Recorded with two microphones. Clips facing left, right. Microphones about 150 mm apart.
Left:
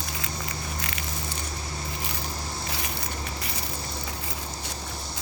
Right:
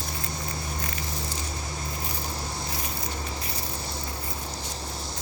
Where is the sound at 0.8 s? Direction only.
85° left.